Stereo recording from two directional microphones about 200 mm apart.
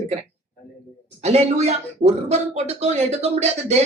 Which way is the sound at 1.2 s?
35° right (ahead or behind).